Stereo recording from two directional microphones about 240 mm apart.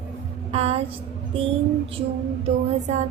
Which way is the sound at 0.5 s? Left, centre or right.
Right.